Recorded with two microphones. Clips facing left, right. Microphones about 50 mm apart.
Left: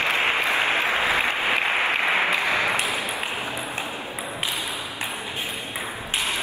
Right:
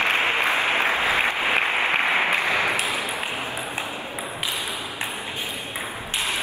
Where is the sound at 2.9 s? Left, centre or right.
Right.